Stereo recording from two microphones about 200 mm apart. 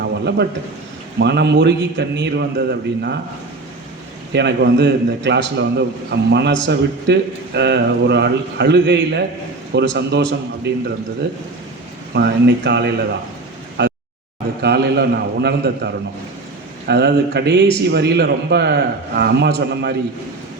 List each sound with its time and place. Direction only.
0.0 s a sound: 60° right (ahead or behind)
1.2 s speech: 55° right (ahead or behind)
4.3 s speech: 60° right (ahead or behind)
12.1 s speech: 60° right (ahead or behind)
13.8 s a sound: 60° right (ahead or behind)
14.6 s speech: 55° right (ahead or behind)